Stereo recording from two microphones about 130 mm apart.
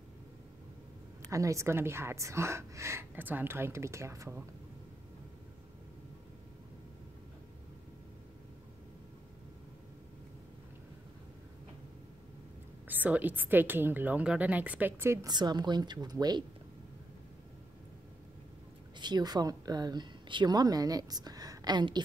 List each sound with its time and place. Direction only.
1.3 s a woman's voice: 25° right (ahead or behind)
12.8 s a woman's voice: 15° right (ahead or behind)
15.2 s a woman's voice: 35° right (ahead or behind)
18.9 s speech: 35° right (ahead or behind)